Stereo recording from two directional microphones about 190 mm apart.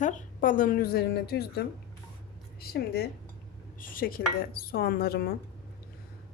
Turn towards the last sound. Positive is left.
turn(degrees=55)  # may be behind; listen again after turning